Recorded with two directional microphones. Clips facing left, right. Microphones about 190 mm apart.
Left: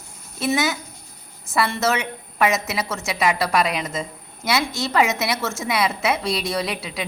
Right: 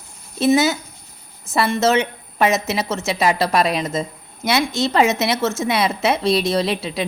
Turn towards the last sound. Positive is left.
turn(degrees=-25)  # may be behind; listen again after turning